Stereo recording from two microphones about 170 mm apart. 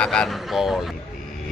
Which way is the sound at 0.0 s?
5° left (ahead or behind).